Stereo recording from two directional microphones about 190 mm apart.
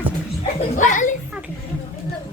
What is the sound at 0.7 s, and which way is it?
Speech, 40° left (ahead or behind).